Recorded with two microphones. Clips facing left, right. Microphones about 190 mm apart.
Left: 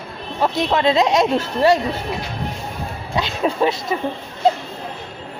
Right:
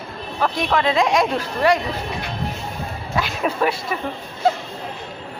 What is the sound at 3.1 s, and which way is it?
Speech, 25° left (ahead or behind).